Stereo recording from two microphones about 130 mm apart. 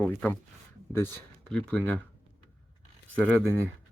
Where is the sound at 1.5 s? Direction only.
10° left (ahead or behind).